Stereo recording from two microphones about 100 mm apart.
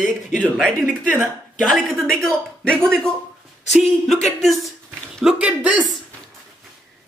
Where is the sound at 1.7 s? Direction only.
5° left (ahead or behind).